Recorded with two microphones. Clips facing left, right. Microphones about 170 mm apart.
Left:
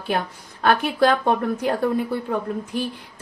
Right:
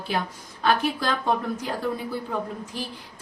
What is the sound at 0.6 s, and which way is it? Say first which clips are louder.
Speech: left 5 dB; 60° left (ahead or behind).